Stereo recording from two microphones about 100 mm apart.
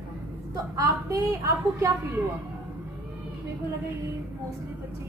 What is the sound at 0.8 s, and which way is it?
A woman's voice, 30° right (ahead or behind).